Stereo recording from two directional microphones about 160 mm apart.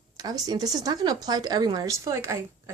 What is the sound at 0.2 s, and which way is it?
A woman's voice, 25° right (ahead or behind).